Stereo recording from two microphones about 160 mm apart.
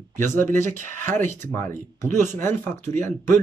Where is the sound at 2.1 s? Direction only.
15° left (ahead or behind).